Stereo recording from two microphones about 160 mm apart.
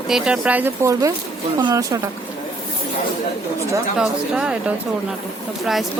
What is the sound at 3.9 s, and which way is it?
Speech, 5° right (ahead or behind).